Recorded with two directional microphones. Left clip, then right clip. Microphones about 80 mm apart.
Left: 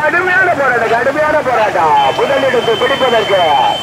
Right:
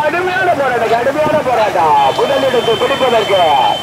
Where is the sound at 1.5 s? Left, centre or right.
Centre.